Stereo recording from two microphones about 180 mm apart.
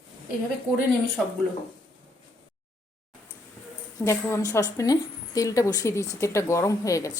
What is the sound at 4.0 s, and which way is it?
A woman's voice, 15° left (ahead or behind).